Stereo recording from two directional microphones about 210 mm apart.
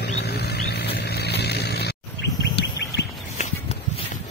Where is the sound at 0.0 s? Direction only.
50° left (ahead or behind).